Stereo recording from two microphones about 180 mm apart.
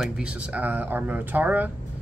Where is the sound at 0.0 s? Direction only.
5° right (ahead or behind).